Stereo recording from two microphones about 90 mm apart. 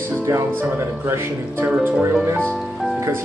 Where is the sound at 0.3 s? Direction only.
30° right (ahead or behind).